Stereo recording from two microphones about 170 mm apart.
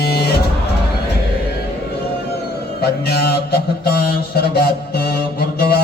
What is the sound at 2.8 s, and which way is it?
Mantra, 70° left (ahead or behind).